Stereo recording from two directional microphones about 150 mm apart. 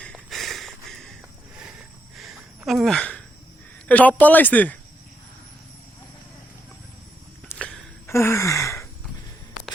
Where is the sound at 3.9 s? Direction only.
10° left (ahead or behind).